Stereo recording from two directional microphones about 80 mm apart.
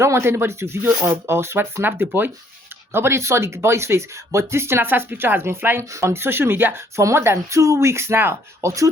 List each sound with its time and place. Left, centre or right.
0.0 s speech: right
5.9 s speech: right
6.9 s speech: right
8.6 s speech: right